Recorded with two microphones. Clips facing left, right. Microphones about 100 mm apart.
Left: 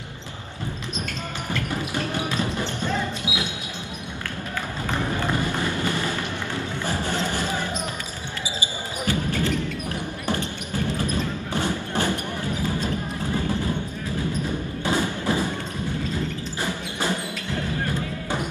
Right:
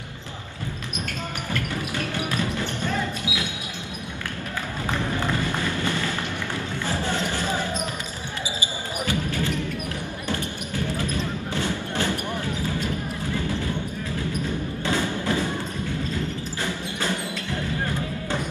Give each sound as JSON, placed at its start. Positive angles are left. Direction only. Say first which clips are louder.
{"t": 1.5, "sound": "music", "louder": "left 2 dB", "side_deg": 25}
{"t": 4.9, "sound": "run", "louder": "left 1 dB", "side_deg": 20}
{"t": 9.3, "sound": "a sound", "louder": "left 2 dB", "side_deg": -20}
{"t": 11.0, "sound": "a sound", "louder": "left 1 dB", "side_deg": 20}
{"t": 14.8, "sound": "thump", "louder": "left 2 dB", "side_deg": 15}
{"t": 16.6, "sound": "music", "louder": "left 2 dB", "side_deg": 20}